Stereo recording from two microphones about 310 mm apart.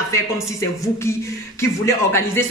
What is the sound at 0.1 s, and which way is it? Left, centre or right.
A man's voice, centre.